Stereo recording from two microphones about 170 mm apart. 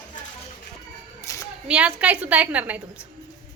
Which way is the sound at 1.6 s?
5° right (ahead or behind).